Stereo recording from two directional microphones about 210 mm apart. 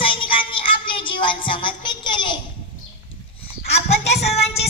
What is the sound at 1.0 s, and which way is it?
Child singing, 25° left (ahead or behind).